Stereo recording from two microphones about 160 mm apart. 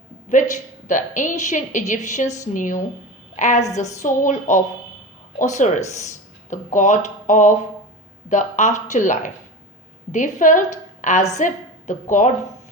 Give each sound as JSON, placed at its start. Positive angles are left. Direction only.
{"t": 0.3, "sound": "a woman's voice", "side_deg": 55}